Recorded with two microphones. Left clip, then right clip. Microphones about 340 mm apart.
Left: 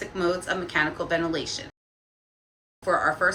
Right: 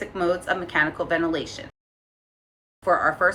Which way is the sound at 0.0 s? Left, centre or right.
Centre.